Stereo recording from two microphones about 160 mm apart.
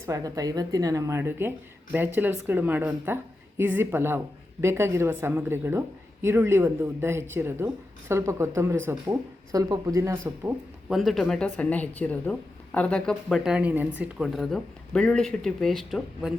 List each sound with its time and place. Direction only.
0.0 s speech: 20° right (ahead or behind)
10.8 s speech: centre (ahead or behind)